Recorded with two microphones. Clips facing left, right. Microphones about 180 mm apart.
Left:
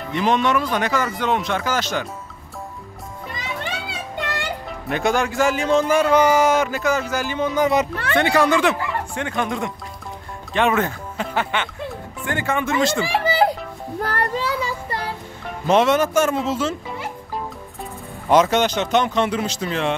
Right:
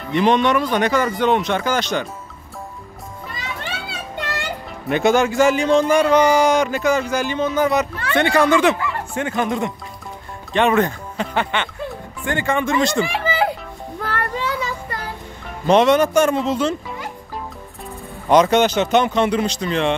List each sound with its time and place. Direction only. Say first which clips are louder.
0.1 s a man's voice: right 3 dB; centre (ahead or behind)
3.6 s children playing: left 1 dB; 20° left (ahead or behind)
4.8 s a man's voice: right 5 dB; centre (ahead or behind)
8.1 s a man's voice: right 2 dB; centre (ahead or behind)
13.0 s music: left 2 dB; 35° left (ahead or behind)
14.0 s child singing: left 1 dB; 35° left (ahead or behind)
15.6 s a man's voice: right 3 dB; 5° left (ahead or behind)
18.3 s a man's voice: right 2 dB; 5° left (ahead or behind)